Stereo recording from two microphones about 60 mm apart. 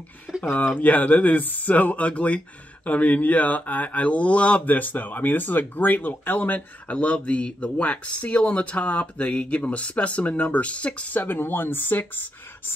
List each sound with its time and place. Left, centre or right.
0.4 s speech: left